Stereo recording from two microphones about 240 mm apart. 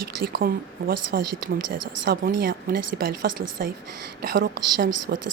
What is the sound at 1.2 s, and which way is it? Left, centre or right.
Speech, right.